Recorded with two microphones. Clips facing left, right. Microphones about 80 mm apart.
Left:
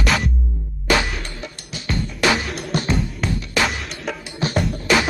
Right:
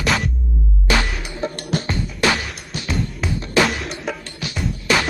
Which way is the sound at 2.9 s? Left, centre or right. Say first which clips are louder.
Left 1 dB; centre.